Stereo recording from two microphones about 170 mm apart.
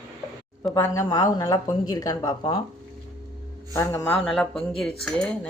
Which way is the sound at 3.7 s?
15° left (ahead or behind).